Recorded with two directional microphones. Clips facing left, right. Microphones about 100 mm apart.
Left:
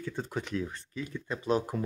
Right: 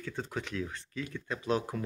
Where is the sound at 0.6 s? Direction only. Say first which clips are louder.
Left 1 dB; 15° left (ahead or behind).